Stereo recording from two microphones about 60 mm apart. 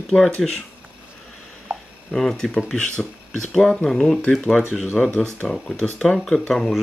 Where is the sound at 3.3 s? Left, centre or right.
Centre.